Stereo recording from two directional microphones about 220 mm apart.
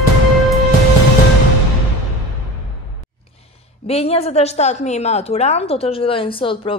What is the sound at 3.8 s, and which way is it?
A woman's voice, 25° left (ahead or behind).